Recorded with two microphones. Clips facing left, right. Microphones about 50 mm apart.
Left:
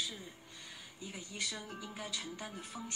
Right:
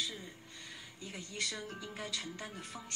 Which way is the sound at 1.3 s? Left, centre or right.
Centre.